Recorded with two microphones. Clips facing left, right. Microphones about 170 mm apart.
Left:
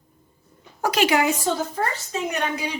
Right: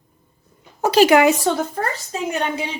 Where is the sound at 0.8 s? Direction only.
30° right (ahead or behind).